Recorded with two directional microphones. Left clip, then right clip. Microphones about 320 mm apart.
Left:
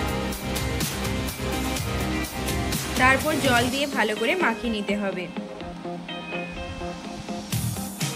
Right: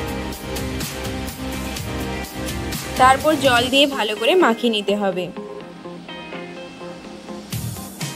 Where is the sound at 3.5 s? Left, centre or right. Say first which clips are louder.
Right 7 dB; centre.